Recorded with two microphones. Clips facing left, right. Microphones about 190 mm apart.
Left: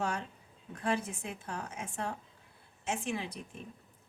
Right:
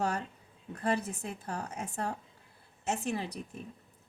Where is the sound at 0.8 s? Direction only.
35° right (ahead or behind).